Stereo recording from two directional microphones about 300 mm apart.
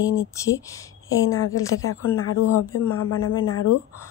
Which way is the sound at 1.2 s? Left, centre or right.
Left.